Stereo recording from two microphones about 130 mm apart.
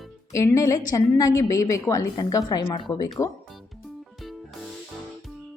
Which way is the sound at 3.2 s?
20° left (ahead or behind).